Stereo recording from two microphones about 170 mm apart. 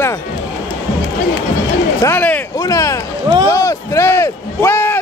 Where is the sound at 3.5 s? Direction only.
20° left (ahead or behind).